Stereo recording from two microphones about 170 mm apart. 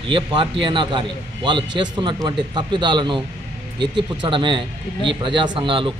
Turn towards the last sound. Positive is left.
turn(degrees=-30)  # may be behind; listen again after turning